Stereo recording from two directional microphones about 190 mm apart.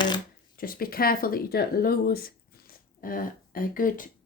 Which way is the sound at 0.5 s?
50° left (ahead or behind).